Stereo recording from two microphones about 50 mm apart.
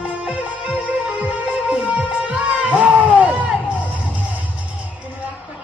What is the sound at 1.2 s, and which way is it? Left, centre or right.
Music, right.